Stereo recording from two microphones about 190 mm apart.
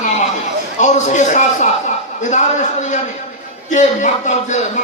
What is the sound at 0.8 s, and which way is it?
A man's voice, 40° left (ahead or behind).